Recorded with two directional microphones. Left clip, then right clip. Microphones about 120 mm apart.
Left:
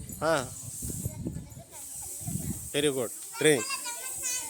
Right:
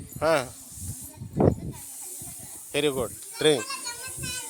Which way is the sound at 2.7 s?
20° left (ahead or behind).